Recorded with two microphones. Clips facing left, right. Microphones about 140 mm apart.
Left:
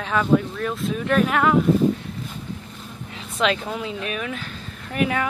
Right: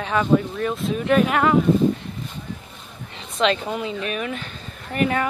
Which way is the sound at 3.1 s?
5° left (ahead or behind).